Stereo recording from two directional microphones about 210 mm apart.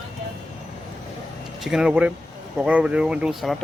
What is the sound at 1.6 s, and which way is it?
Speech, centre (ahead or behind).